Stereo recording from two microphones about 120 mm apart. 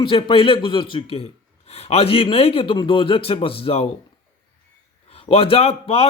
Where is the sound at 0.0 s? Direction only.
50° left (ahead or behind).